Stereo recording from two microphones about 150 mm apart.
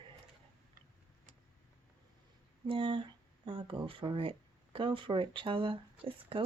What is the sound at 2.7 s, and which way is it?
Speech, 35° right (ahead or behind).